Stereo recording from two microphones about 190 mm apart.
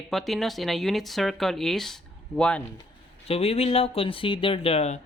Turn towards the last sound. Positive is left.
turn(degrees=35)  # may be behind; listen again after turning